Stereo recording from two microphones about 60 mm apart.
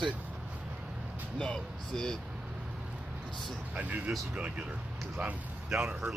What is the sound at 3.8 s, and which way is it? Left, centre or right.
Speech, right.